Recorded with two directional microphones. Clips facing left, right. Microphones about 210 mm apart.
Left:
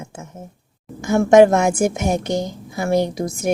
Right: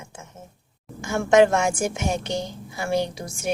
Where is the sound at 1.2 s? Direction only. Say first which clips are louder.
Left 5 dB; 40° left (ahead or behind).